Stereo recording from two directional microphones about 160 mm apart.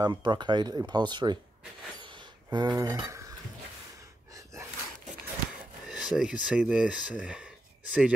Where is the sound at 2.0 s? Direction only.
30° right (ahead or behind).